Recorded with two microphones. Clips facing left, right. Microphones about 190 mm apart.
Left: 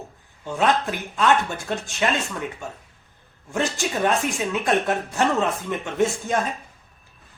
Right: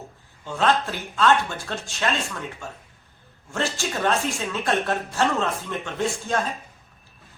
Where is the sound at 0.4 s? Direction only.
15° left (ahead or behind).